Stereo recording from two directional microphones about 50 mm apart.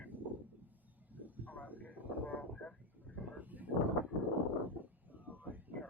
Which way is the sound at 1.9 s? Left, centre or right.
Right.